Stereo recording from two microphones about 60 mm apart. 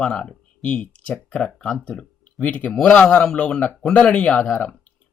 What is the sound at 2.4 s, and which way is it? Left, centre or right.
Speech, left.